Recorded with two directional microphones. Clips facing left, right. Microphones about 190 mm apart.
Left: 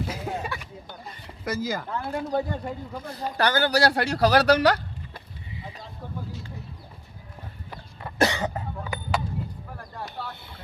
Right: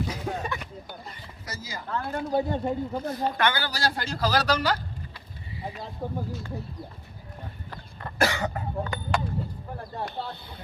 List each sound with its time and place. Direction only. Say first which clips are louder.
0.1 s a sound: even; 10° left (ahead or behind)
1.5 s speech: left 11 dB; 55° left (ahead or behind)
1.9 s speech: even; 5° left (ahead or behind)
2.5 s speech: right 5 dB; 25° right (ahead or behind)
3.3 s speech: left 6 dB; 35° left (ahead or behind)
3.6 s speech: left 8 dB; 65° left (ahead or behind)
6.0 s speech: right 7 dB; 45° right (ahead or behind)
8.2 s cough: left 2 dB; 20° left (ahead or behind)
8.8 s a sound: right 1 dB; 5° left (ahead or behind)
9.7 s a sound: right 5 dB; 25° right (ahead or behind)